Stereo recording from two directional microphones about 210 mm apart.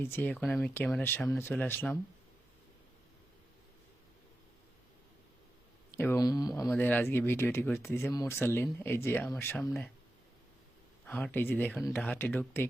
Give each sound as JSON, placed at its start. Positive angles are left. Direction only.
{"t": 0.0, "sound": "speech", "side_deg": 10}
{"t": 6.0, "sound": "speech", "side_deg": 15}
{"t": 11.0, "sound": "speech", "side_deg": 10}